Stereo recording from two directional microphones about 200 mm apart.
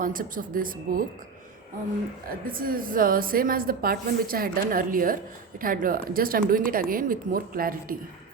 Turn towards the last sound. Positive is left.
turn(degrees=-45)  # may be behind; listen again after turning